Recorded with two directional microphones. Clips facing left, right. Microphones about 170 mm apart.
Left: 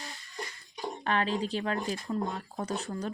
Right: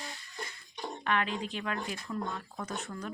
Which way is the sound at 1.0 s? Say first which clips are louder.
Left 3 dB; 35° left (ahead or behind).